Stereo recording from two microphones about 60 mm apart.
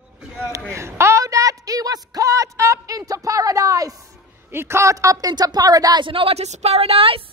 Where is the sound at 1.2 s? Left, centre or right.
Right.